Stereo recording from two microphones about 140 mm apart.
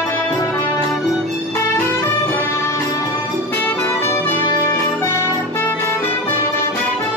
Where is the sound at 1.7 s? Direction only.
15° left (ahead or behind).